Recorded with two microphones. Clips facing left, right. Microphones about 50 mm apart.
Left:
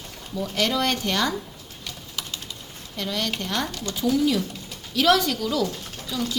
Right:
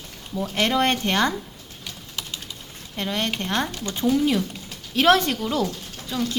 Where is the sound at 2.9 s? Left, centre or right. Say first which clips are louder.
Right 2 dB; right.